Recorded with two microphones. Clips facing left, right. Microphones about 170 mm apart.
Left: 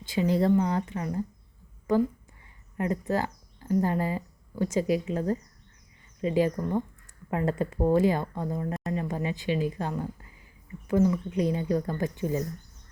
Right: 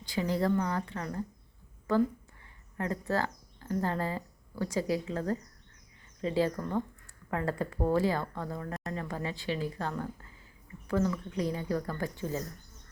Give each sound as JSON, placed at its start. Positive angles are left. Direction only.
{"t": 0.0, "sound": "speech", "side_deg": 20}